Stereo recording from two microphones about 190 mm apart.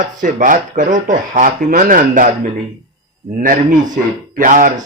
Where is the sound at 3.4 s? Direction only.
45° right (ahead or behind).